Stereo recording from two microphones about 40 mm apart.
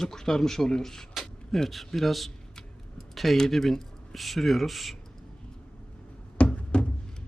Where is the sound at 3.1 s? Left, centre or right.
Centre.